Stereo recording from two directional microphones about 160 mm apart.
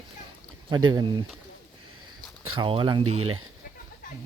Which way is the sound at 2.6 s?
30° right (ahead or behind).